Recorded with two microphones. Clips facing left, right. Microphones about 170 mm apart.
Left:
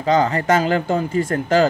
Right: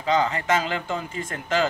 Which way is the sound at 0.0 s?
40° left (ahead or behind).